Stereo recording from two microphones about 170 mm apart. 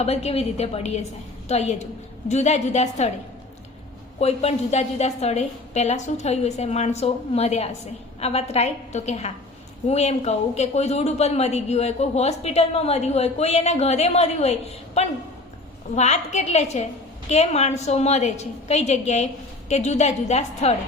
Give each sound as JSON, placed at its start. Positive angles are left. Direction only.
{"t": 0.0, "sound": "a man's voice", "side_deg": 40}
{"t": 4.2, "sound": "a man's voice", "side_deg": 40}
{"t": 16.0, "sound": "a man's voice", "side_deg": 40}